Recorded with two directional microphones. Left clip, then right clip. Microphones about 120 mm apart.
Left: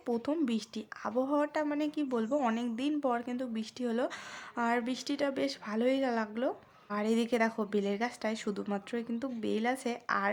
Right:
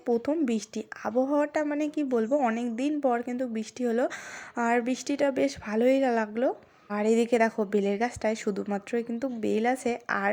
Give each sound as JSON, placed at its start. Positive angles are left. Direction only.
{"t": 0.4, "sound": "a woman's voice", "side_deg": -30}